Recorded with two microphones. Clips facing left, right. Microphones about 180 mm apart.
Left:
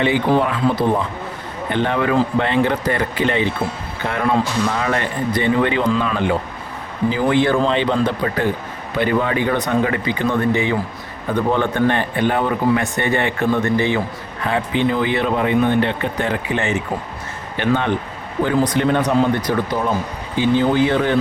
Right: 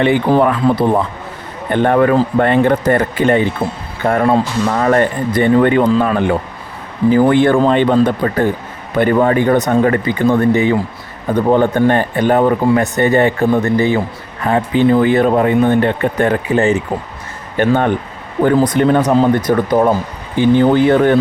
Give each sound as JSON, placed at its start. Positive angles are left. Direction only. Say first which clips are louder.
{"t": 0.0, "sound": "speech", "louder": "right 5 dB", "side_deg": -55}